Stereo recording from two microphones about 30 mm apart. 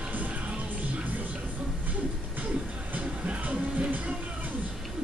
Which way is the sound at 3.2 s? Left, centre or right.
Right.